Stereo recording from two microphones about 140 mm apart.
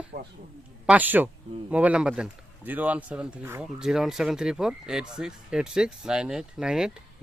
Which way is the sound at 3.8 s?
5° right (ahead or behind).